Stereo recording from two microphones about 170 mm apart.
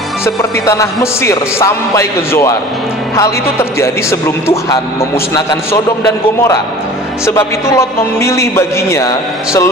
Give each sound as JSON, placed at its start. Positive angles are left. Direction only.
{"t": 0.2, "sound": "speech", "side_deg": 15}
{"t": 7.2, "sound": "speech", "side_deg": 15}